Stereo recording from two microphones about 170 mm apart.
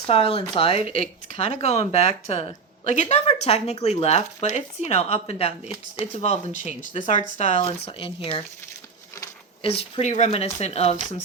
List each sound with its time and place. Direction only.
0.1 s speech: 35° left (ahead or behind)
9.6 s speech: 35° left (ahead or behind)